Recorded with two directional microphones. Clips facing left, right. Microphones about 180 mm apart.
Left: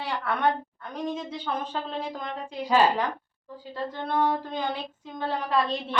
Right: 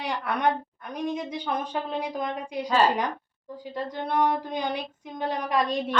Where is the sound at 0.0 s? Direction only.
15° right (ahead or behind).